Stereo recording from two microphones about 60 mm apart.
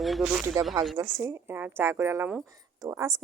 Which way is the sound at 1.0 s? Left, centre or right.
Right.